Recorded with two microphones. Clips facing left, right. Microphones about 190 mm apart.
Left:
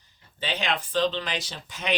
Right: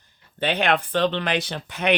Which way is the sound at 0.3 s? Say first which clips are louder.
Right 7 dB; 60° right (ahead or behind).